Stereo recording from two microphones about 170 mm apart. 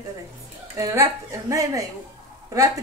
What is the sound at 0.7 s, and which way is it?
A woman's voice, 20° right (ahead or behind).